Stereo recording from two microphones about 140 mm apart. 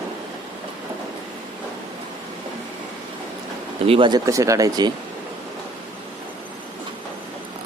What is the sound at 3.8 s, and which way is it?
Speech, 45° right (ahead or behind).